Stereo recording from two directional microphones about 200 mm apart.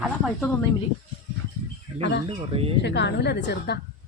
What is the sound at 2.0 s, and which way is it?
Speech, 60° left (ahead or behind).